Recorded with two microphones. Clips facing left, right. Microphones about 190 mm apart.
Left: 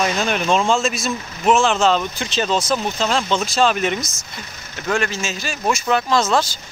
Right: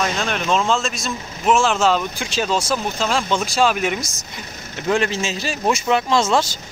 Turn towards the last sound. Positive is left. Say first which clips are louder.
# even
turn(degrees=-25)  # may be behind; listen again after turning